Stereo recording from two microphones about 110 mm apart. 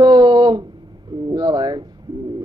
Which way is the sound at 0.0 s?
40° right (ahead or behind).